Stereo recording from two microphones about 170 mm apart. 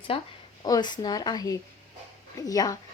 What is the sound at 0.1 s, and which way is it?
A woman's voice, 35° left (ahead or behind).